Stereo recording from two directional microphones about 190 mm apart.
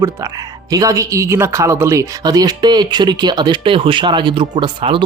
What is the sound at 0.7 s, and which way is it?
Speech, 15° right (ahead or behind).